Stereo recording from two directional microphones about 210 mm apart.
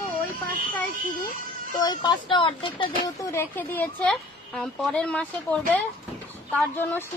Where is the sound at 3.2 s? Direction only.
10° left (ahead or behind).